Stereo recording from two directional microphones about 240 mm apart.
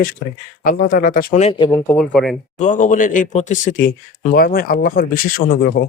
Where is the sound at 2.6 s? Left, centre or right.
Left.